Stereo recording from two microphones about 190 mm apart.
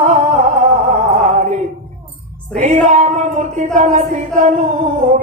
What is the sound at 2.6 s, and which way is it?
Music, 40° right (ahead or behind).